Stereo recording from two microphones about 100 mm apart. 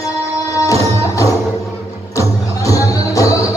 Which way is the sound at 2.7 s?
35° left (ahead or behind).